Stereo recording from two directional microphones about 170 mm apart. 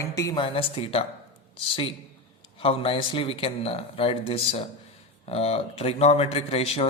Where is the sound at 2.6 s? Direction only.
35° left (ahead or behind).